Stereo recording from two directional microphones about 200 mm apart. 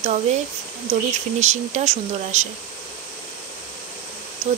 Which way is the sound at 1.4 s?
35° right (ahead or behind).